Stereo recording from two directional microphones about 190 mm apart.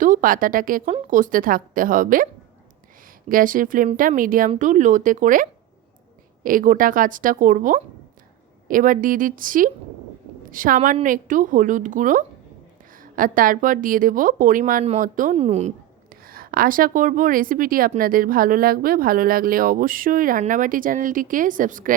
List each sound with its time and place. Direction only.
0.0 s a woman's voice: 45° right (ahead or behind)
3.2 s a woman's voice: 45° right (ahead or behind)
16.2 s a woman's voice: 50° right (ahead or behind)